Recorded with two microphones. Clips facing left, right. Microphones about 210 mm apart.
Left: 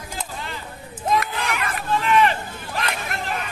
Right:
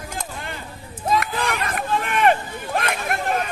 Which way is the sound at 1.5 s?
35° right (ahead or behind).